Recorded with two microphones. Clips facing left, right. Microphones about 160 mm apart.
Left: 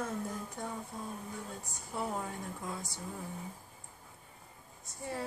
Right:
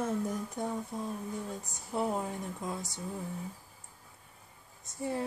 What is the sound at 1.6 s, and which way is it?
Speech, 20° right (ahead or behind).